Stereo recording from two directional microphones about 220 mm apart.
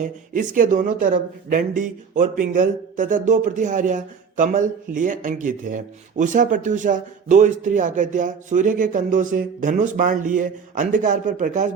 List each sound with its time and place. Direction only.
0.0 s speech: 35° right (ahead or behind)